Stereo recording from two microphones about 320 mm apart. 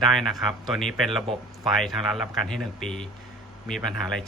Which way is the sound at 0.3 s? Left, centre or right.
Centre.